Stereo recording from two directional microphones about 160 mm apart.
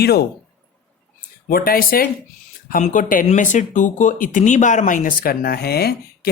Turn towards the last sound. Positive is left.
turn(degrees=75)  # may be behind; listen again after turning